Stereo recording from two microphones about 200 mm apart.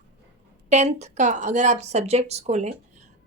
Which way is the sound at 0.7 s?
35° right (ahead or behind).